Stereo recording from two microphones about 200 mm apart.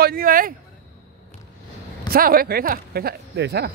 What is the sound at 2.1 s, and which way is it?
Speech, 45° right (ahead or behind).